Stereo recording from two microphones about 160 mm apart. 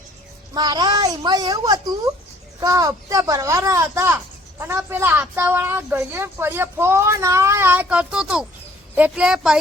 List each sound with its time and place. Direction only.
0.5 s a child's voice: 25° right (ahead or behind); by 9.6 s 5° right (ahead or behind)